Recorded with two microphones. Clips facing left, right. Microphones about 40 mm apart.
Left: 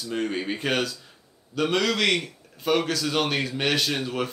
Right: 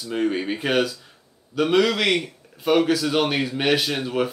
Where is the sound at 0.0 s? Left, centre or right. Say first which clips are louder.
Right 4 dB; centre.